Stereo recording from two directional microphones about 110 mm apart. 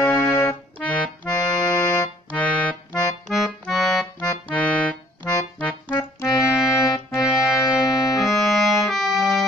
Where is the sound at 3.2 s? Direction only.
Centre (ahead or behind).